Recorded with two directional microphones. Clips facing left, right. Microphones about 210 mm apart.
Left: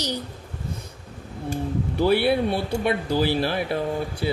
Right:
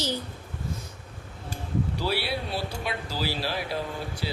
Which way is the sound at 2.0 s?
55° left (ahead or behind).